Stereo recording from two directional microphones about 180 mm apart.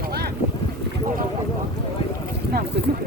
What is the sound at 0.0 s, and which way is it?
Boat, 60° right (ahead or behind).